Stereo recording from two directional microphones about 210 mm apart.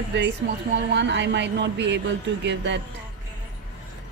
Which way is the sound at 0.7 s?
60° right (ahead or behind).